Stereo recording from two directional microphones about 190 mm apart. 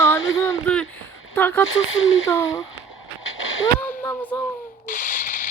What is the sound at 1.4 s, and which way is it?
Speech, 10° left (ahead or behind).